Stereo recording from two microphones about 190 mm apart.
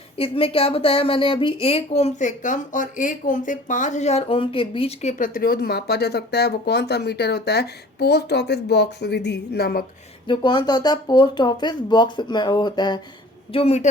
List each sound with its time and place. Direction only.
0.2 s a woman's voice: 30° left (ahead or behind); by 9.8 s 55° left (ahead or behind)
10.2 s a woman's voice: 25° left (ahead or behind)